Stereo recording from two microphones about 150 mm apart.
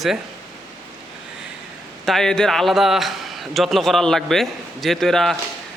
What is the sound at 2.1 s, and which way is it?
A man's voice, 5° left (ahead or behind).